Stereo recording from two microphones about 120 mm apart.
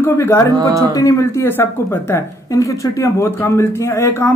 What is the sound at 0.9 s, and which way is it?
Speech, 30° left (ahead or behind).